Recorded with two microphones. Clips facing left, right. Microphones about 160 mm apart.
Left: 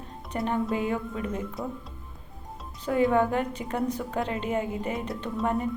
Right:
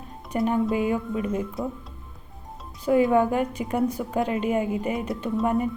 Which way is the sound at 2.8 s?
15° right (ahead or behind).